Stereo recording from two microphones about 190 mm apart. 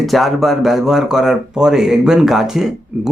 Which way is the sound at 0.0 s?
Centre (ahead or behind).